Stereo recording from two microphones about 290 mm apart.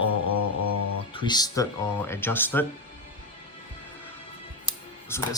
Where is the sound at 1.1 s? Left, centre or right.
Centre.